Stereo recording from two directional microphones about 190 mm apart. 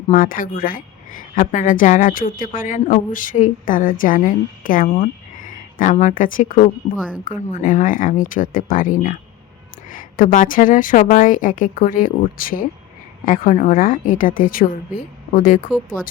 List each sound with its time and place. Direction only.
0.1 s a woman's voice: 45° left (ahead or behind)